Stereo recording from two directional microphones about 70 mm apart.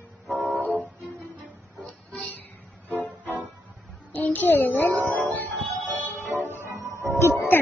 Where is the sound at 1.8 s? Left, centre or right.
Centre.